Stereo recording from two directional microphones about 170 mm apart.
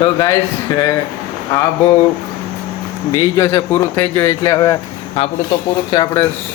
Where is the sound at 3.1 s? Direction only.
20° left (ahead or behind).